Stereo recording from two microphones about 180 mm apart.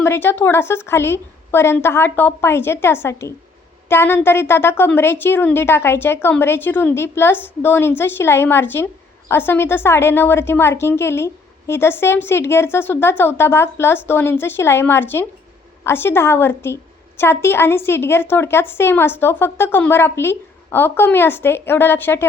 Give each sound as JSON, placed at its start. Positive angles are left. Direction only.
{"t": 0.0, "sound": "a woman's voice", "side_deg": 15}